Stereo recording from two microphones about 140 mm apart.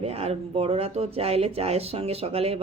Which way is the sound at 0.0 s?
45° right (ahead or behind).